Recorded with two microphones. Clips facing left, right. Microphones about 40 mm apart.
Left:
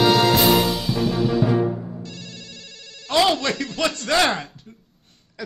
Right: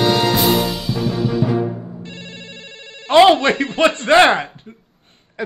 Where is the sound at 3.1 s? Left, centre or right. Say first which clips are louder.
Right 9 dB; right.